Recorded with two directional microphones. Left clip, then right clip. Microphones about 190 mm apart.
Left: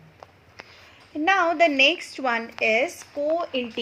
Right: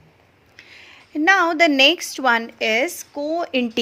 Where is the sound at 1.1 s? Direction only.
50° right (ahead or behind).